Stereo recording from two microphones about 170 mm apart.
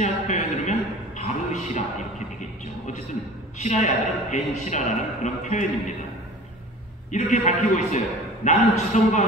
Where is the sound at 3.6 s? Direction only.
40° left (ahead or behind).